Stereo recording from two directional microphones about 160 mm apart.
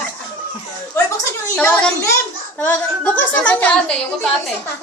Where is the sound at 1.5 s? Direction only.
5° left (ahead or behind).